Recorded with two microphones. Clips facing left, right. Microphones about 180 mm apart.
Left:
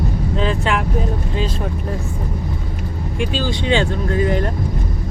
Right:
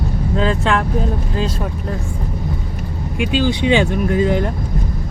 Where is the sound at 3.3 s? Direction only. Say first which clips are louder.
Right 5 dB; 15° right (ahead or behind).